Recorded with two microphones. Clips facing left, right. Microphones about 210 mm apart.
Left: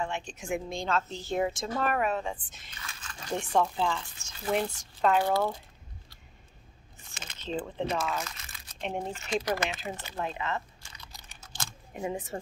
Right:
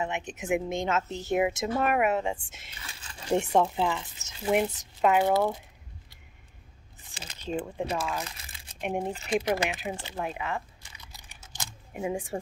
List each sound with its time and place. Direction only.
0.0 s speech: 20° right (ahead or behind)
7.4 s speech: 10° right (ahead or behind)
8.2 s crumpling: 30° right (ahead or behind)
8.8 s speech: 15° right (ahead or behind)
9.3 s speech: 25° right (ahead or behind)
9.6 s speech: 10° right (ahead or behind)
10.1 s a sound: 10° right (ahead or behind)
11.9 s speech: 10° right (ahead or behind)